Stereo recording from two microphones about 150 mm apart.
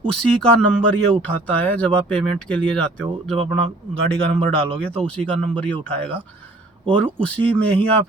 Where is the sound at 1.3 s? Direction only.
10° left (ahead or behind).